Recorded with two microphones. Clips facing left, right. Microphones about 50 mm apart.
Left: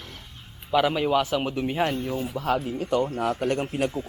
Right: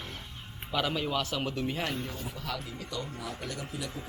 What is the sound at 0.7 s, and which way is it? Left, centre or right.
Speech, centre.